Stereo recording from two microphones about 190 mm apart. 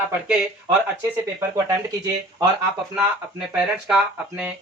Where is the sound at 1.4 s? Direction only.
15° right (ahead or behind).